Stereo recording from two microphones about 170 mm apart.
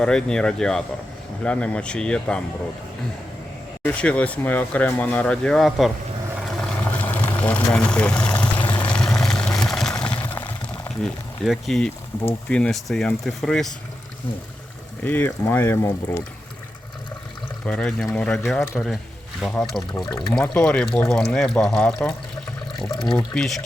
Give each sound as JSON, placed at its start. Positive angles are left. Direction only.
{"t": 0.0, "sound": "speech", "side_deg": 5}
{"t": 3.8, "sound": "speech", "side_deg": 5}
{"t": 6.6, "sound": "a sound", "side_deg": 10}
{"t": 8.4, "sound": "vehicle", "side_deg": 10}
{"t": 9.2, "sound": "a sound", "side_deg": 5}
{"t": 10.8, "sound": "speech", "side_deg": 5}
{"t": 15.0, "sound": "speech", "side_deg": 10}
{"t": 17.7, "sound": "speech", "side_deg": 5}